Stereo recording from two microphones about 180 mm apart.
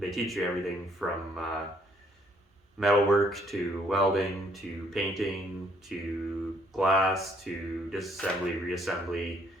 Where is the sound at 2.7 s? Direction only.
Centre (ahead or behind).